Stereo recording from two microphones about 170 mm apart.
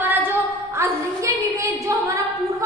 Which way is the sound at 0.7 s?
20° right (ahead or behind).